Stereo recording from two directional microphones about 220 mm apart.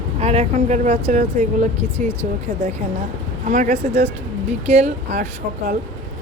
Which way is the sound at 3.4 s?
35° right (ahead or behind).